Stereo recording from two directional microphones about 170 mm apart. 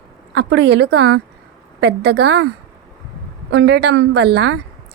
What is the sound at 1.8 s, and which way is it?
Speech, 80° right.